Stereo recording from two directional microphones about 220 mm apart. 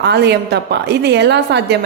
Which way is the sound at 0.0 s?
50° right (ahead or behind).